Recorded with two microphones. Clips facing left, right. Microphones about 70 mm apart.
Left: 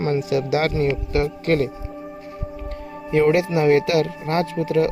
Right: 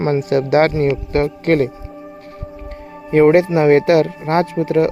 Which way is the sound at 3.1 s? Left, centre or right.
Right.